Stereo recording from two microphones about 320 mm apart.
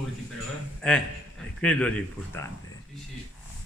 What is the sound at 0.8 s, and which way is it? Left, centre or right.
Speech, centre.